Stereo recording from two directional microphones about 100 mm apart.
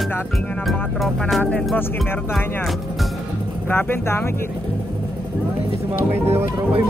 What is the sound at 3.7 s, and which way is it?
Speech, 20° left (ahead or behind).